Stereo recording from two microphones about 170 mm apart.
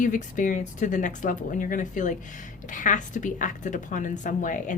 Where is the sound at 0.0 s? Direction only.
50° left (ahead or behind).